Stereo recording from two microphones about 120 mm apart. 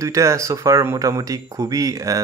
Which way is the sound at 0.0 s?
25° right (ahead or behind).